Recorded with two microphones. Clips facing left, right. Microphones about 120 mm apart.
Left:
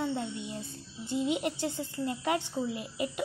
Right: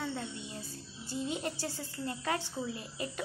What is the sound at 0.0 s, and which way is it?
A child's voice, 20° left (ahead or behind).